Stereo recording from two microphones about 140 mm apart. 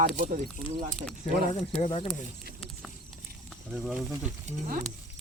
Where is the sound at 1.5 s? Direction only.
50° left (ahead or behind).